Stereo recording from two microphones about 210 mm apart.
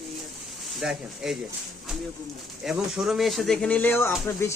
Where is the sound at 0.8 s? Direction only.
Centre (ahead or behind).